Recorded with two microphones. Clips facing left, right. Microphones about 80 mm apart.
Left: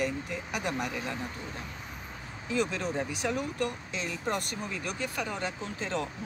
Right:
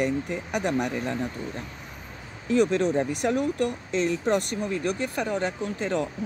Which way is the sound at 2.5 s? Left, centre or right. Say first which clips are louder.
Right 9 dB; right.